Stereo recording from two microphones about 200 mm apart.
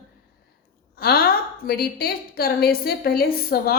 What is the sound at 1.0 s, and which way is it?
A woman's voice, 50° left (ahead or behind).